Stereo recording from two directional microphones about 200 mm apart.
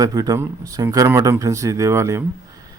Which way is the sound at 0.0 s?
20° right (ahead or behind).